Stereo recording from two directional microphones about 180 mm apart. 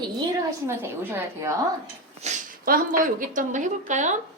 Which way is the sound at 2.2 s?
40° right (ahead or behind).